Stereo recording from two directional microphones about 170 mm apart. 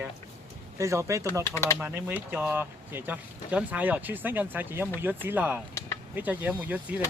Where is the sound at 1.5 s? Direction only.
15° left (ahead or behind).